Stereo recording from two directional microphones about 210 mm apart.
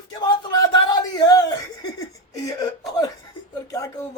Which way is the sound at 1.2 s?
20° left (ahead or behind).